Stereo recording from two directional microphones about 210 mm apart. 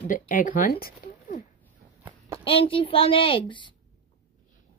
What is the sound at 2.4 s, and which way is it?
Speech, 25° left (ahead or behind).